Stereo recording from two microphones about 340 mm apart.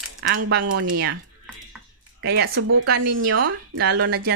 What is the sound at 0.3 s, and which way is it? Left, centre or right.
Speech, right.